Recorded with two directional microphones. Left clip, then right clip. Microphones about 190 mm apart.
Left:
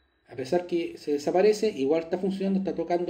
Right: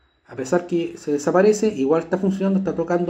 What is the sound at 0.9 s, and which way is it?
Speech, 55° right (ahead or behind).